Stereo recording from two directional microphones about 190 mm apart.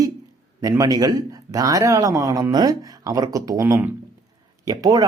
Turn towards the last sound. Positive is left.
turn(degrees=-20)  # may be behind; listen again after turning